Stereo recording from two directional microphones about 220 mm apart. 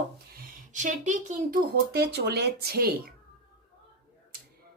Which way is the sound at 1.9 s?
50° right (ahead or behind).